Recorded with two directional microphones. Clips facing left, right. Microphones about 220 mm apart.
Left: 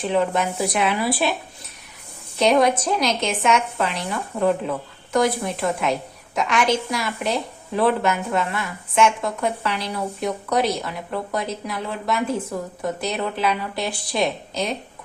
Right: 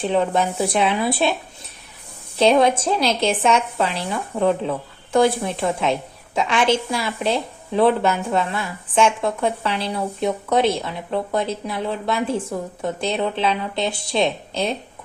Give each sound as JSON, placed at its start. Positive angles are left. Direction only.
{"t": 0.3, "sound": "a woman's voice", "side_deg": -25}
{"t": 2.4, "sound": "a woman's voice", "side_deg": -25}
{"t": 4.3, "sound": "speech", "side_deg": -10}
{"t": 5.1, "sound": "a woman's voice", "side_deg": -30}